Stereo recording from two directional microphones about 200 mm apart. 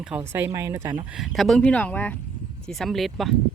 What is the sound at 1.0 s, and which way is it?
Speech, centre (ahead or behind).